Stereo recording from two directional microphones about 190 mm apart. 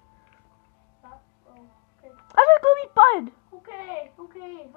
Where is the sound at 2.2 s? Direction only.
60° right (ahead or behind).